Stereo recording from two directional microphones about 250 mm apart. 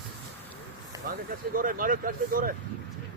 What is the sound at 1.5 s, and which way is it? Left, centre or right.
Speech, right.